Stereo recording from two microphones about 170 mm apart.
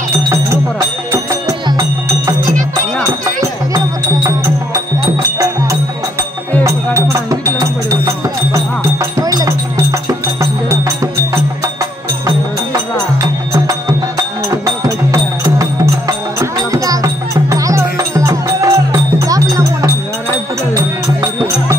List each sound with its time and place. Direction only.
0.1 s music: 15° right (ahead or behind)
3.7 s music: 20° right (ahead or behind)
6.6 s music: 20° right (ahead or behind)
9.2 s music: 20° right (ahead or behind)
13.2 s music: 20° right (ahead or behind)